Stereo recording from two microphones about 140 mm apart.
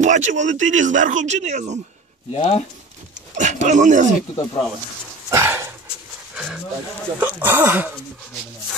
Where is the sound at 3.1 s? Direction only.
60° right (ahead or behind).